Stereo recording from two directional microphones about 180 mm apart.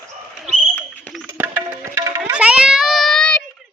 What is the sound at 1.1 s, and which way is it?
Music, 10° right (ahead or behind).